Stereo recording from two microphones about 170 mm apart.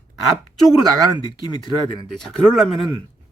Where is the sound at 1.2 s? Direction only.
25° left (ahead or behind).